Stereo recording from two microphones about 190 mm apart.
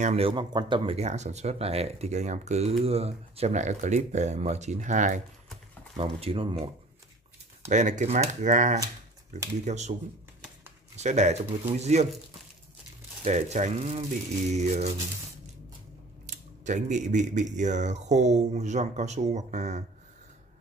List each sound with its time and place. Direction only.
0.0 s speech: 30° right (ahead or behind)
5.9 s speech: 30° right (ahead or behind)
7.6 s speech: 40° right (ahead or behind)
11.0 s speech: 35° right (ahead or behind)
13.2 s speech: 35° right (ahead or behind)
16.6 s speech: 40° right (ahead or behind)